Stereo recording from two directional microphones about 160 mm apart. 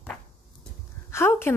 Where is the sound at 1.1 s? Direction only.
15° left (ahead or behind).